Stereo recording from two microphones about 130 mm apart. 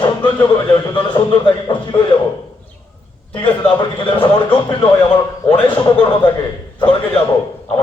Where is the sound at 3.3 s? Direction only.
40° left (ahead or behind).